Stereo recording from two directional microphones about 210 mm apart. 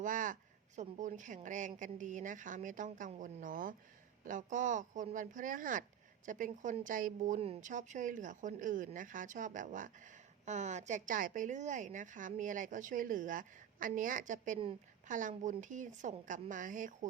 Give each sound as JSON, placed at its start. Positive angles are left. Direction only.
{"t": 0.0, "sound": "a woman's voice", "side_deg": -40}